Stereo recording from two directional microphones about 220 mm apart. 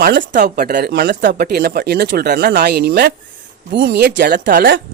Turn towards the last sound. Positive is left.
turn(degrees=-40)  # may be behind; listen again after turning